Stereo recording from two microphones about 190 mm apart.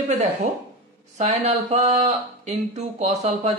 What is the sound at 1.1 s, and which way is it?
A man's voice, 35° right (ahead or behind).